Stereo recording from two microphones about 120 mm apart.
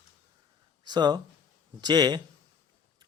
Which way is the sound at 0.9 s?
35° right (ahead or behind).